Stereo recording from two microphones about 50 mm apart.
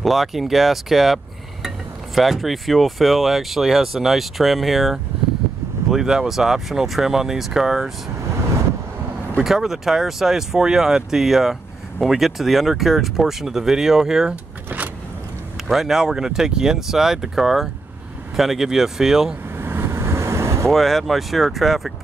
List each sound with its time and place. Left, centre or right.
0.0 s speech: centre
9.4 s speech: centre
14.3 s vehicle: right
15.7 s speech: centre
19.5 s vehicle: right
20.6 s speech: centre